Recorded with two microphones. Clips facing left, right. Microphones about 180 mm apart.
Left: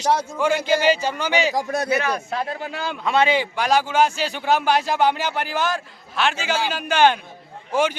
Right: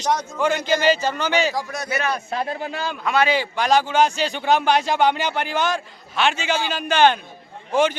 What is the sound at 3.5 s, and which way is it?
A man's voice, 10° left (ahead or behind).